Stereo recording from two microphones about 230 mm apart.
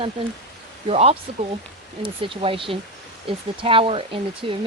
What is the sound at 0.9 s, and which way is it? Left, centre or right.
Speech, right.